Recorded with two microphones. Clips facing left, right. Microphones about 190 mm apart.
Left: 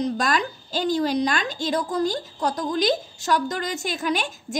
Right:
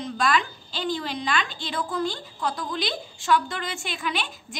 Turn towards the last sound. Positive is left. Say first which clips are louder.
# left 6 dB
turn(degrees=45)  # may be behind; listen again after turning